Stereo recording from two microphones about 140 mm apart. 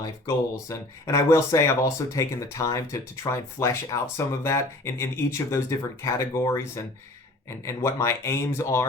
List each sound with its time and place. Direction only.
0.7 s speech: 20° left (ahead or behind)